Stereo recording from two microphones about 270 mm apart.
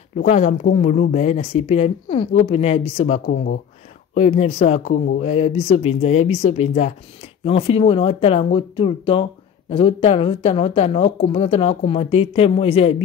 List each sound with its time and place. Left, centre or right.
0.2 s speech: left